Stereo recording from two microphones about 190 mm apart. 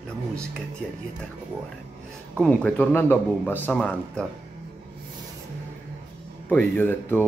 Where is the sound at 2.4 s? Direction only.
5° left (ahead or behind).